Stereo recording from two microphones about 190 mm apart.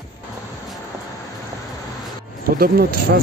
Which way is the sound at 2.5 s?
50° right (ahead or behind).